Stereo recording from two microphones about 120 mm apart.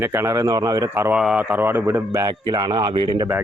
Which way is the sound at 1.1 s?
5° right (ahead or behind).